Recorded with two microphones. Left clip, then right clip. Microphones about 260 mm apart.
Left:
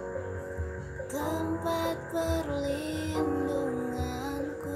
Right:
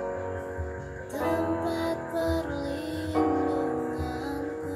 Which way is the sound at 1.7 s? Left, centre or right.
Centre.